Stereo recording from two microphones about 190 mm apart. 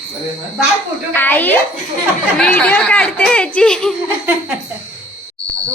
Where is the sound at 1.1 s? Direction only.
10° left (ahead or behind).